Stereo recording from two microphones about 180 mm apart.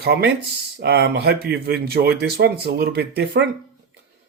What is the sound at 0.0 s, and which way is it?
Speech, 60° right (ahead or behind).